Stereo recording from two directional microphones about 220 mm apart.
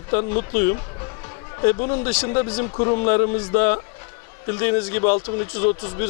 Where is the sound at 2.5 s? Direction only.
25° left (ahead or behind).